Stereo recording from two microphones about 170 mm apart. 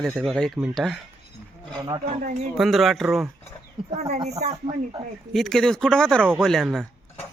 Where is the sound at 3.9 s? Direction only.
40° right (ahead or behind).